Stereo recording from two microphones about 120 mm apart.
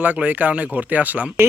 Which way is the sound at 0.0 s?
15° right (ahead or behind).